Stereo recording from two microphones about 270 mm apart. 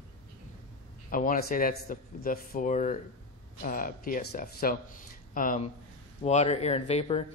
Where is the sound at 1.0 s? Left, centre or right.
Left.